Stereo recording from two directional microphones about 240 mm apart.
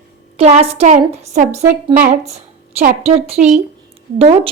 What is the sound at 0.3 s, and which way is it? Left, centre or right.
A woman's voice, right.